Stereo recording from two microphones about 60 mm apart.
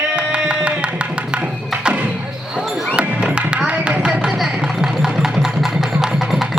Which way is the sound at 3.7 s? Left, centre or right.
Centre.